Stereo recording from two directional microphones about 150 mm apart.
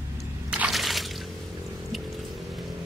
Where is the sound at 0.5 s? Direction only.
5° right (ahead or behind).